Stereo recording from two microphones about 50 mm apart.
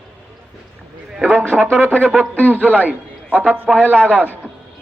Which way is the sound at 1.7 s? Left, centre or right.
Right.